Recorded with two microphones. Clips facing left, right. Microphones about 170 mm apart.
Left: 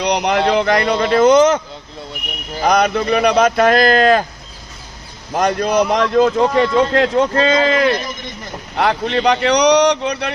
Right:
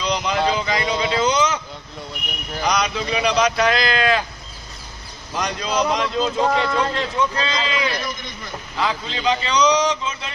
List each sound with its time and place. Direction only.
0.0 s speech: 65° left (ahead or behind)
2.6 s speech: 55° left (ahead or behind)
5.3 s speech: 55° left (ahead or behind)
6.9 s speech: 65° left (ahead or behind)
8.7 s a man's voice: 65° left (ahead or behind)